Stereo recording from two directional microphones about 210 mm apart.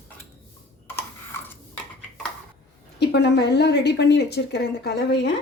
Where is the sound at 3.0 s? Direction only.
55° left (ahead or behind).